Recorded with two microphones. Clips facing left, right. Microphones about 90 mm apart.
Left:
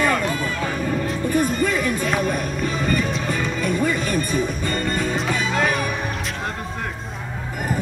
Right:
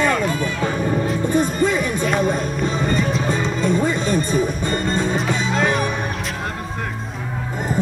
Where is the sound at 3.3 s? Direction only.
20° right (ahead or behind).